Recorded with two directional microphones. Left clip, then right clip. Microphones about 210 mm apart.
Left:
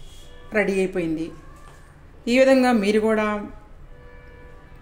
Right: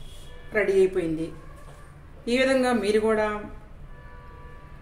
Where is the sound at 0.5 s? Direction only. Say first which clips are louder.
Right 1 dB; 40° left (ahead or behind).